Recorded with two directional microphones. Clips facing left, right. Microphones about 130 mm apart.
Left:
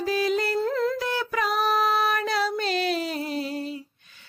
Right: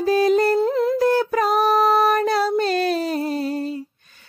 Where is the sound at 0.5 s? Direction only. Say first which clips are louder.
Right 5 dB; 20° right (ahead or behind).